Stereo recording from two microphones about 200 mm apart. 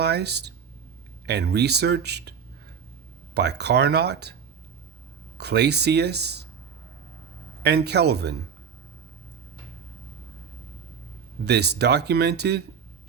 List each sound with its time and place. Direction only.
0.0 s speech: 55° right (ahead or behind)
3.3 s speech: 55° right (ahead or behind)
5.4 s speech: 55° right (ahead or behind)
7.6 s speech: 55° right (ahead or behind)
11.4 s speech: 55° right (ahead or behind)